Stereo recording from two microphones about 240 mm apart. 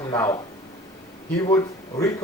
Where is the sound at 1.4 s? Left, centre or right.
Centre.